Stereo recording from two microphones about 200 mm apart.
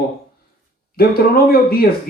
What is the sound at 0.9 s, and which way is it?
Speech, 50° left (ahead or behind).